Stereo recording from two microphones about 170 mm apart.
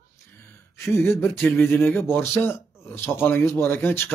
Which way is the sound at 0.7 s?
15° left (ahead or behind).